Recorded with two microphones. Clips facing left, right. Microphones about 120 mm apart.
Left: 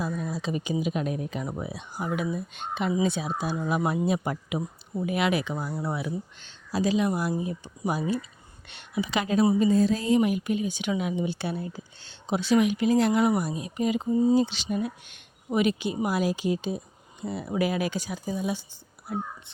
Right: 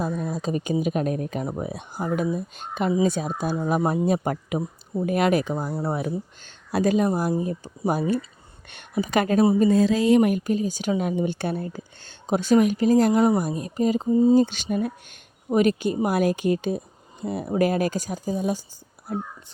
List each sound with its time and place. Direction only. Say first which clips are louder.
0.2 s speech: right 4 dB; 45° right (ahead or behind)
3.8 s speech: right 3 dB; 30° right (ahead or behind)
4.0 s speech: right 4 dB; 45° right (ahead or behind)
6.7 s speech: right 4 dB; 55° right (ahead or behind)
9.6 s mantra: right 4 dB; 90° right
10.2 s speech: right 4 dB; 50° right (ahead or behind); by 14.3 s 30° right (ahead or behind)
14.3 s speech: right 4 dB; 50° right (ahead or behind)